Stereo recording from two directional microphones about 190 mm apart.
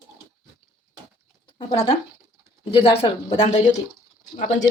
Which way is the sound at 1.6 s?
25° left (ahead or behind).